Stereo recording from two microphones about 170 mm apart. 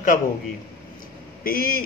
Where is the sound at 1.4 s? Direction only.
60° left (ahead or behind).